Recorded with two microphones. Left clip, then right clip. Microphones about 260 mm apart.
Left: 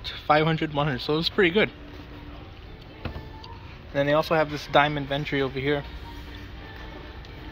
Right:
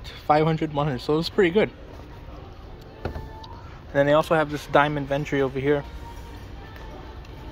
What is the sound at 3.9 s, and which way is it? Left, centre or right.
Speech, centre.